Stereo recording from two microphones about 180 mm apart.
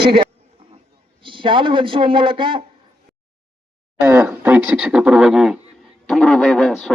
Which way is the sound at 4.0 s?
15° right (ahead or behind).